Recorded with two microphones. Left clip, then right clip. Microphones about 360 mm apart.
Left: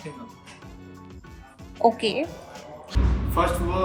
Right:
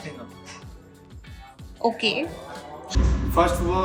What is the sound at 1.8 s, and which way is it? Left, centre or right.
Speech, centre.